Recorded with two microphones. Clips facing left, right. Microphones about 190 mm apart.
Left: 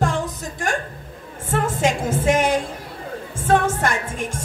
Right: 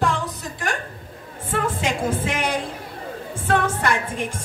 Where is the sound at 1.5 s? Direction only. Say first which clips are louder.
Left 3 dB; 45° left (ahead or behind).